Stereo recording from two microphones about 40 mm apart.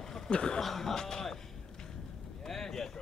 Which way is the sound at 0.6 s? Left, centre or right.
Centre.